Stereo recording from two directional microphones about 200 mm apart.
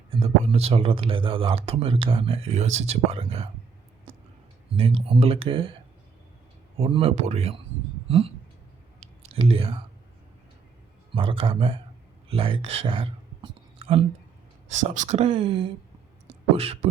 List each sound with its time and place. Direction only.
0.1 s speech: 30° right (ahead or behind)
4.9 s speech: 30° right (ahead or behind)
6.7 s speech: 30° right (ahead or behind)
9.0 s clicking: 35° right (ahead or behind)
9.4 s speech: 30° right (ahead or behind)
11.1 s speech: 25° right (ahead or behind)
16.2 s a sound: 30° right (ahead or behind)